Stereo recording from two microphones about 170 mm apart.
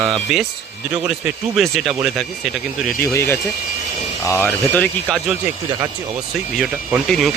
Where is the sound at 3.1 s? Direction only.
15° left (ahead or behind).